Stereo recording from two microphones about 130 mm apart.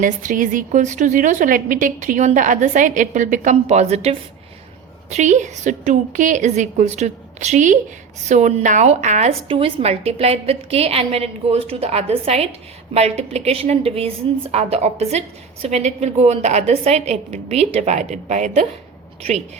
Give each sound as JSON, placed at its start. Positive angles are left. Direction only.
{"t": 0.0, "sound": "a woman's voice", "side_deg": -85}
{"t": 5.1, "sound": "a woman's voice", "side_deg": -65}
{"t": 9.5, "sound": "a woman's voice", "side_deg": -45}